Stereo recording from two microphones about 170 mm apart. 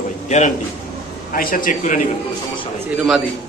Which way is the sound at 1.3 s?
55° left (ahead or behind).